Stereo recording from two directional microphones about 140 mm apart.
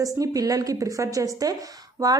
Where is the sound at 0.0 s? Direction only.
25° right (ahead or behind).